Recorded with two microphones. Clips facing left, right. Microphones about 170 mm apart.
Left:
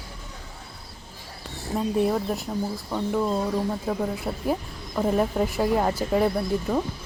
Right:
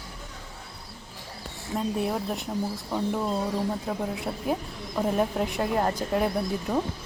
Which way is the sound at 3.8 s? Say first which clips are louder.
Left 3 dB; centre (ahead or behind).